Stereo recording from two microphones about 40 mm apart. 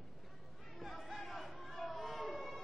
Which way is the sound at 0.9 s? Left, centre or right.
Centre.